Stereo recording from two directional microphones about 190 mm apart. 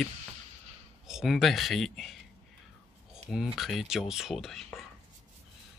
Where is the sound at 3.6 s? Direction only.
Centre (ahead or behind).